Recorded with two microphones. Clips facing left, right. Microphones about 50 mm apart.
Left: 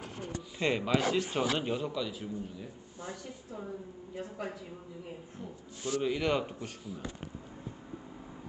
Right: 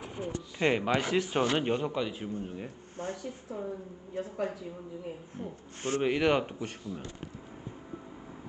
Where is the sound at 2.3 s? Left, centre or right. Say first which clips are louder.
Right 3 dB; right.